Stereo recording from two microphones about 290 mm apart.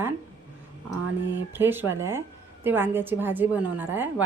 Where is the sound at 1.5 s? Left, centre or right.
Centre.